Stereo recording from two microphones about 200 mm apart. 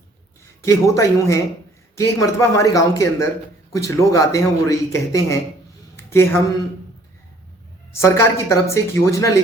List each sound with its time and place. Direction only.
0.6 s a man's voice: 15° left (ahead or behind)
6.0 s a sound: 10° left (ahead or behind)
7.9 s a man's voice: 15° left (ahead or behind)